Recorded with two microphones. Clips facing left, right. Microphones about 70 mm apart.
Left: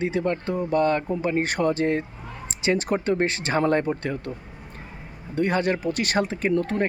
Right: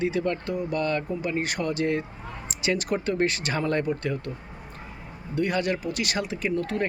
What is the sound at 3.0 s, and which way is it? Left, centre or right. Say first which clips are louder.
Speech: left 2 dB; left.